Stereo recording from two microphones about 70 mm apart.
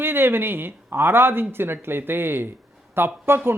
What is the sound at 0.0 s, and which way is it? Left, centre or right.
A man's voice, right.